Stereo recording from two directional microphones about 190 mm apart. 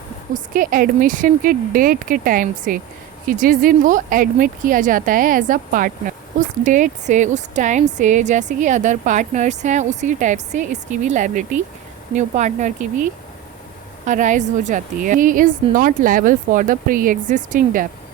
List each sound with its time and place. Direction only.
0.3 s a woman's voice: 45° right (ahead or behind)